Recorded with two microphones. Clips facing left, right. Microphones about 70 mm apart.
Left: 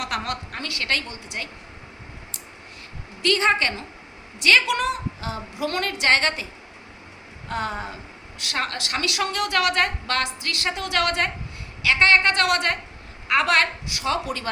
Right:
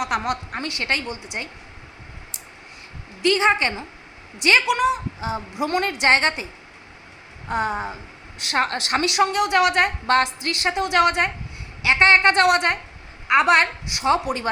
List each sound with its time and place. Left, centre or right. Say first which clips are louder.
0.0 s a woman's voice: right 4 dB; centre
3.2 s a woman's voice: right 2 dB; centre
4.6 s a woman's voice: right 4 dB; centre
5.3 s a woman's voice: right 4 dB; centre